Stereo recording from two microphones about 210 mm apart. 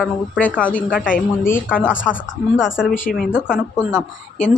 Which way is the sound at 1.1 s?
40° left (ahead or behind).